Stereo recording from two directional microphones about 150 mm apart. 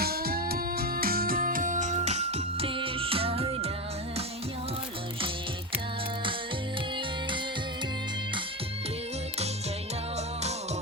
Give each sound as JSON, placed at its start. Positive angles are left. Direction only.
{"t": 0.0, "sound": "music", "side_deg": -90}